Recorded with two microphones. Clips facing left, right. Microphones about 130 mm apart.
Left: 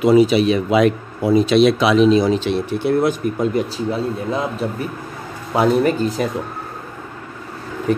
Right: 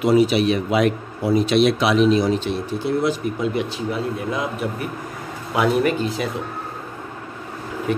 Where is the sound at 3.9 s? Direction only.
30° left (ahead or behind).